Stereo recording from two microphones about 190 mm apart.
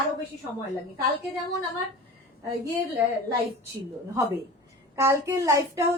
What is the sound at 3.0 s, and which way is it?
Speech, 10° right (ahead or behind).